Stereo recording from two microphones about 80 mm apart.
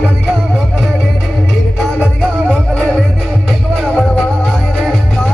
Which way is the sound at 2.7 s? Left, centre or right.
Centre.